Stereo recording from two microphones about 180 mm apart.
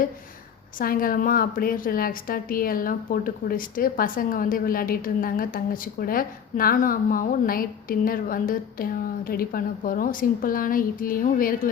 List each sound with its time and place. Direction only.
0.8 s a woman's voice: 50° left (ahead or behind)